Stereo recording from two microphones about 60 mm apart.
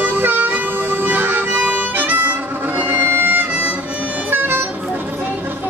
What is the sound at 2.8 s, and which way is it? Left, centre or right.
Music, right.